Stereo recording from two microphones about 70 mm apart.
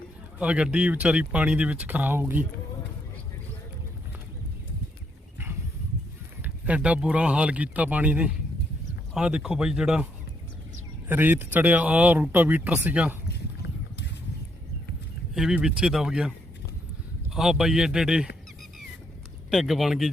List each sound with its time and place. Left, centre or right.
0.3 s speech: centre
6.4 s a man's voice: centre
11.1 s speech: right
15.5 s a man's voice: centre
19.5 s speech: centre